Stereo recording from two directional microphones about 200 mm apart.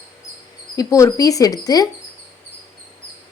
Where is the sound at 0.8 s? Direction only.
15° left (ahead or behind).